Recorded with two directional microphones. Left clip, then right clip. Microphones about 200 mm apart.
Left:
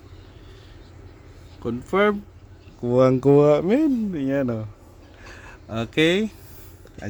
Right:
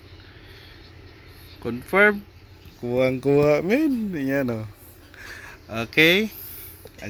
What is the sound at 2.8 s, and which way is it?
Speech, 25° left (ahead or behind).